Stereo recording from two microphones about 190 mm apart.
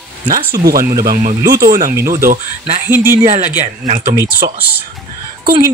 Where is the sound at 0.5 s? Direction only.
50° right (ahead or behind).